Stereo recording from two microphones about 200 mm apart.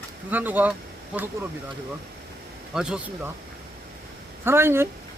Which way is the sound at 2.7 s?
5° right (ahead or behind).